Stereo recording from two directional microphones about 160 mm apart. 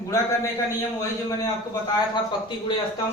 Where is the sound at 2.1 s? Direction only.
30° left (ahead or behind).